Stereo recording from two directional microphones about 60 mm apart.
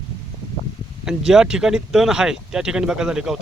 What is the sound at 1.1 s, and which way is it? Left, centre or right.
Speech, centre.